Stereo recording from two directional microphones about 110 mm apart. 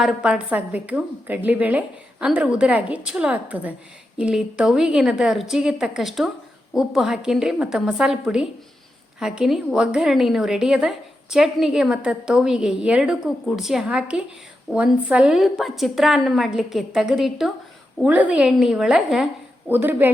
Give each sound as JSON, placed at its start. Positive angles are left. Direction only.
{"t": 0.0, "sound": "a woman's voice", "side_deg": -5}
{"t": 18.0, "sound": "a woman's voice", "side_deg": -10}
{"t": 19.6, "sound": "a woman's voice", "side_deg": -20}